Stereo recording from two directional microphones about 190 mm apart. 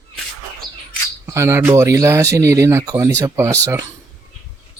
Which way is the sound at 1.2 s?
15° right (ahead or behind).